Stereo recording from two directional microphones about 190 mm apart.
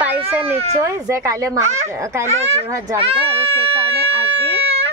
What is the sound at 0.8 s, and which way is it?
Speech, 15° right (ahead or behind).